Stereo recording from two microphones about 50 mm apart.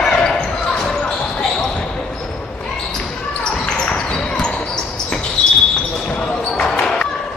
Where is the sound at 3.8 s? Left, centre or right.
Centre.